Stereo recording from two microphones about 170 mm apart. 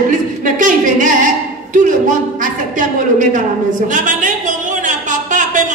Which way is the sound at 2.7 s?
50° right (ahead or behind).